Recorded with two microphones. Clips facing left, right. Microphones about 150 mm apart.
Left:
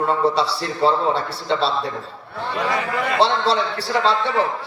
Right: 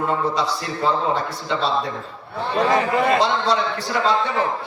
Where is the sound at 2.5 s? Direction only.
30° right (ahead or behind).